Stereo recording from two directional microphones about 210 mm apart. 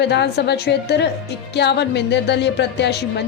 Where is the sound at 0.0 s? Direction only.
55° left (ahead or behind).